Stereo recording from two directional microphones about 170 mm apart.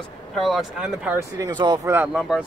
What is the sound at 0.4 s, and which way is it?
Speech, centre (ahead or behind).